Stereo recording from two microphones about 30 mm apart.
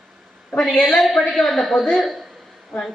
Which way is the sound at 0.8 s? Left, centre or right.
Centre.